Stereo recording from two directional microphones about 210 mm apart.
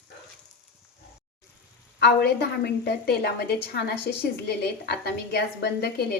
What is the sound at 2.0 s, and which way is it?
A woman's voice, 50° left (ahead or behind).